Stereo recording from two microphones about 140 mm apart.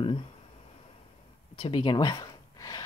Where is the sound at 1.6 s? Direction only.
35° left (ahead or behind).